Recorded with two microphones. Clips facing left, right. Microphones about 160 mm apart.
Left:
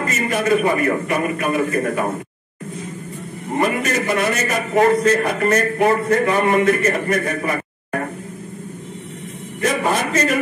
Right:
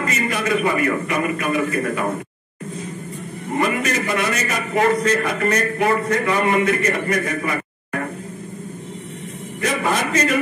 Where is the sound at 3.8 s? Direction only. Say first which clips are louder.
Left 2 dB; 45° left (ahead or behind).